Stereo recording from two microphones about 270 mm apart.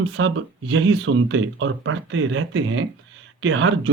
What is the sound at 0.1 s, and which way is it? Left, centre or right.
Speech, right.